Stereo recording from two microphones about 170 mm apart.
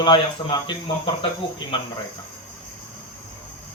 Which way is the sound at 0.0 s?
25° left (ahead or behind).